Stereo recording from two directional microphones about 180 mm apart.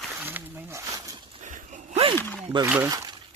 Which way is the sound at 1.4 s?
45° right (ahead or behind).